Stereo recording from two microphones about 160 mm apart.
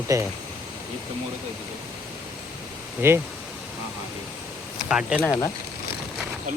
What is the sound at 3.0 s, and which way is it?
Speech, 15° right (ahead or behind).